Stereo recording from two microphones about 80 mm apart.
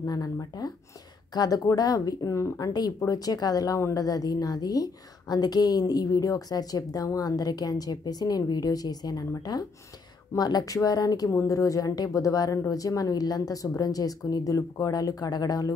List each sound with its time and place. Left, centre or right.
0.0 s a woman's voice: left
2.6 s a woman's voice: left